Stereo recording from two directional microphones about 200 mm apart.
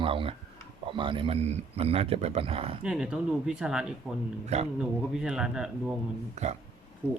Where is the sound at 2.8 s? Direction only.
5° right (ahead or behind).